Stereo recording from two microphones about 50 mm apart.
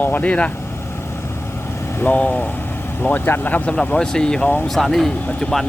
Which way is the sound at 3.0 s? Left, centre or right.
Left.